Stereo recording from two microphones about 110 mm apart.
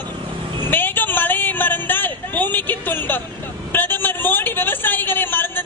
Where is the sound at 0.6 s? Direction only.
15° left (ahead or behind).